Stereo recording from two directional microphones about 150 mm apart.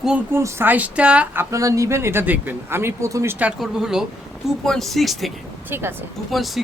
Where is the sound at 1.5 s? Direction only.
20° right (ahead or behind); by 5.3 s centre (ahead or behind).